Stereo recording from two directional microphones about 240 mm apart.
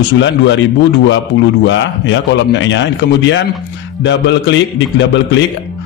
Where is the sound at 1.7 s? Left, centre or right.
Left.